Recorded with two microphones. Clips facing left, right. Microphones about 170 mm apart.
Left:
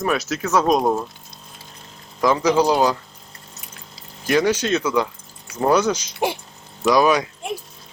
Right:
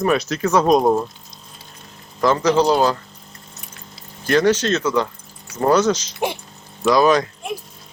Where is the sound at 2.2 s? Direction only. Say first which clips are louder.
Right 1 dB; 10° left (ahead or behind).